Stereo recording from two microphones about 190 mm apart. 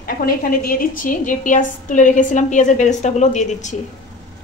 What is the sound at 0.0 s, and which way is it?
A woman's voice, 50° left (ahead or behind).